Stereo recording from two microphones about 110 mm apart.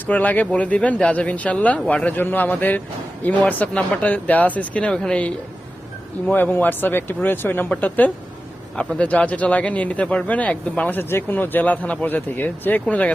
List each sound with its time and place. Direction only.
0.1 s a man's voice: 15° left (ahead or behind)
6.3 s a man's voice: 15° left (ahead or behind)